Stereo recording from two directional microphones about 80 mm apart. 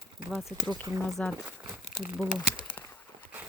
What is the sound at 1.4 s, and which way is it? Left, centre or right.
Speech, centre.